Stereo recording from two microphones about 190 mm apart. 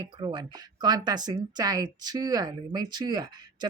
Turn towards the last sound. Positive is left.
turn(degrees=-20)  # may be behind; listen again after turning